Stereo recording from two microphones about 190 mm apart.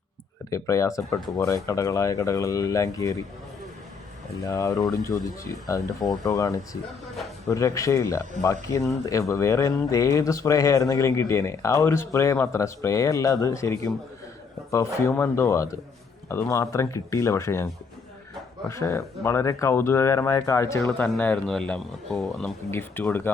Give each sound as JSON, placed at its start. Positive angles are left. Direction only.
{"t": 0.5, "sound": "speech", "side_deg": 15}
{"t": 4.4, "sound": "speech", "side_deg": 20}
{"t": 18.7, "sound": "speech", "side_deg": 15}